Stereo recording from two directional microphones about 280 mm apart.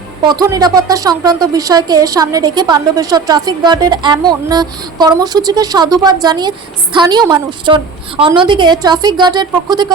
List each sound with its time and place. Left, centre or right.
0.3 s a woman's voice: centre